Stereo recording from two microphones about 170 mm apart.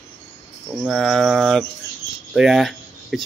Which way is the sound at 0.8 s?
Centre (ahead or behind).